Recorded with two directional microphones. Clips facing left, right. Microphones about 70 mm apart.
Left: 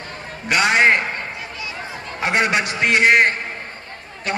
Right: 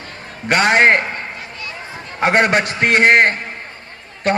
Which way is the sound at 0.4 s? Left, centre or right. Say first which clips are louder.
Right 3 dB; right.